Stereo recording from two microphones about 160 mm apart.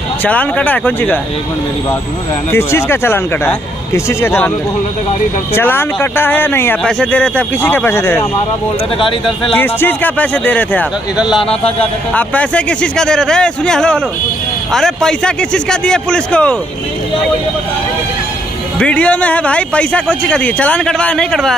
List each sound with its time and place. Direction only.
0.2 s speech: 10° left (ahead or behind)
2.5 s speech: 15° left (ahead or behind)
5.5 s speech: 15° left (ahead or behind)
9.6 s speech: 10° left (ahead or behind)
11.3 s a man's voice: 35° left (ahead or behind)
12.1 s a man's voice: 10° left (ahead or behind)
18.8 s speech: 10° left (ahead or behind)